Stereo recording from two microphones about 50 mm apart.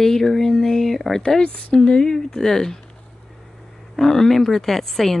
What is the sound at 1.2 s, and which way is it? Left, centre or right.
Speech, centre.